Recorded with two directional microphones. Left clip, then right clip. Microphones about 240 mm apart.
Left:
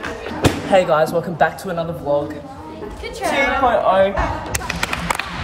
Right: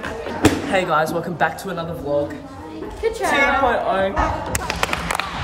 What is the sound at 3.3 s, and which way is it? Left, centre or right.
Speech, centre.